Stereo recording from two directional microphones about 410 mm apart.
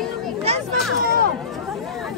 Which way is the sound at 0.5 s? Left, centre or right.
Centre.